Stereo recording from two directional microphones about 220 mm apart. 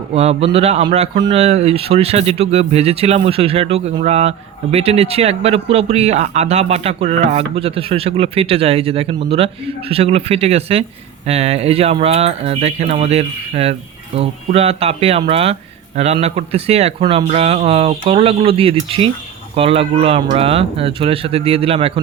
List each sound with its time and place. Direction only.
0.1 s speech: 25° right (ahead or behind)